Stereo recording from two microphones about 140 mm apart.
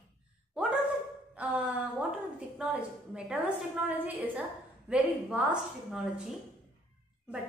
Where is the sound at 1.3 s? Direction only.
10° right (ahead or behind).